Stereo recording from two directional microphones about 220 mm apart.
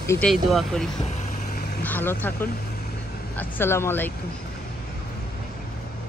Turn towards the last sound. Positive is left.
turn(degrees=10)  # may be behind; listen again after turning